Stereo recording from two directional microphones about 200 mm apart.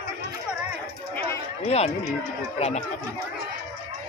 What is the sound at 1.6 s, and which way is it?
Speech, 30° left (ahead or behind).